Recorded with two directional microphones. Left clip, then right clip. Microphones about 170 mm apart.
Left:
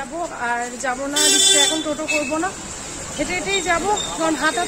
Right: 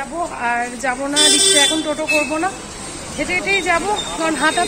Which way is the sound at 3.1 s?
15° left (ahead or behind).